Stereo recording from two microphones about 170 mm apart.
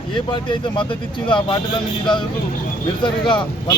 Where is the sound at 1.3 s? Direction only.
30° left (ahead or behind).